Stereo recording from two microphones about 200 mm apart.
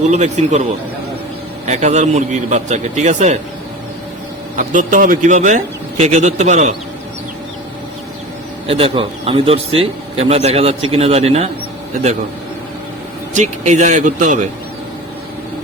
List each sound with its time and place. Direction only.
0.1 s a man's voice: 35° right (ahead or behind)
4.5 s a man's voice: 40° right (ahead or behind)
8.6 s speech: 30° right (ahead or behind)
13.3 s a man's voice: 35° right (ahead or behind)